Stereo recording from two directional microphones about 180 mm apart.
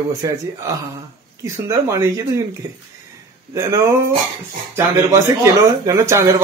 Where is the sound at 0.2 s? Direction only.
20° right (ahead or behind).